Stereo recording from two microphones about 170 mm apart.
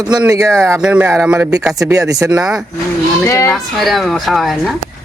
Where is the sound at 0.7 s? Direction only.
5° right (ahead or behind).